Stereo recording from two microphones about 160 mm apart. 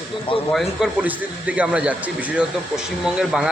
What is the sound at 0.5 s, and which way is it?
A man's voice, 5° right (ahead or behind).